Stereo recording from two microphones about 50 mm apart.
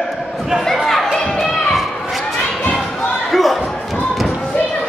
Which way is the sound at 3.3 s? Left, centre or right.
Centre.